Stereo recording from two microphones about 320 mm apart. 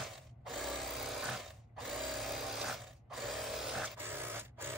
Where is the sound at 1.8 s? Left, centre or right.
Centre.